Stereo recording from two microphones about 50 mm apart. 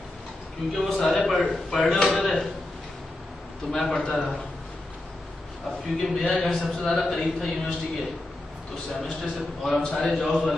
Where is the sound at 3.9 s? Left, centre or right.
Left.